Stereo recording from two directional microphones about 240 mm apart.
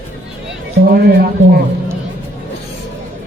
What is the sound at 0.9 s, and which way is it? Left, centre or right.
Speech, right.